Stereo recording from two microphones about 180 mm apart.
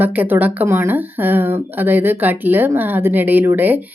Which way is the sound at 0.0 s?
10° right (ahead or behind).